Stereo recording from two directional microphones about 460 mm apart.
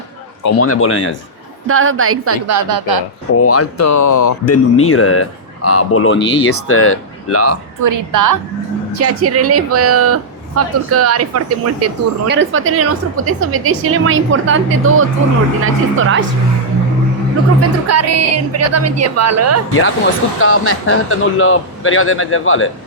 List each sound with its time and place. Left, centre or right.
0.4 s speech: left
1.6 s a woman's voice: right
3.3 s speech: left
6.1 s speech: left
6.7 s speech: left
7.8 s speech: right
9.0 s a woman's voice: right
17.6 s speech: right
20.4 s speech: left